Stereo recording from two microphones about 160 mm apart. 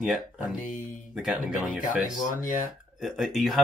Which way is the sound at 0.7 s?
55° left (ahead or behind).